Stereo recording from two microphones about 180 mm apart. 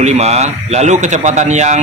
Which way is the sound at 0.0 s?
35° right (ahead or behind).